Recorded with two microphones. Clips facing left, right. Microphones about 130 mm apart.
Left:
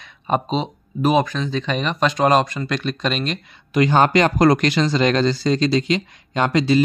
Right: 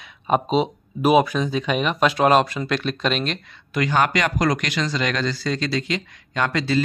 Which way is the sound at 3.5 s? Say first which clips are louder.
Left 6 dB; 20° left (ahead or behind).